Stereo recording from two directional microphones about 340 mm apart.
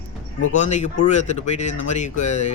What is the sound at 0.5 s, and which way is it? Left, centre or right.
Speech, left.